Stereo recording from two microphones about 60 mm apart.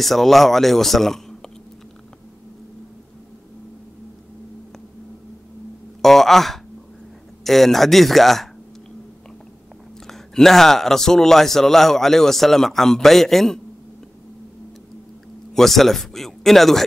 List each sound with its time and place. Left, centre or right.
0.0 s a man's voice: centre
6.0 s a man's voice: centre
10.0 s a man's voice: centre
15.5 s speech: centre